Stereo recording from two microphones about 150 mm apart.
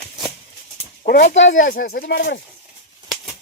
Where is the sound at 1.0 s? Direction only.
80° left.